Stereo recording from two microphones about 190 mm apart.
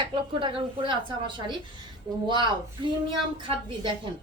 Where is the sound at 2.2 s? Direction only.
25° right (ahead or behind).